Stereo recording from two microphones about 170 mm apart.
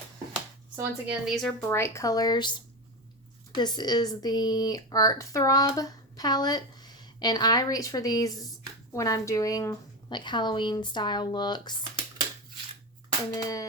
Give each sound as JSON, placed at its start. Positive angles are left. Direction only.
{"t": 1.0, "sound": "speech", "side_deg": 0}
{"t": 1.6, "sound": "speech", "side_deg": 15}
{"t": 3.5, "sound": "speech", "side_deg": 25}
{"t": 13.3, "sound": "speech", "side_deg": 20}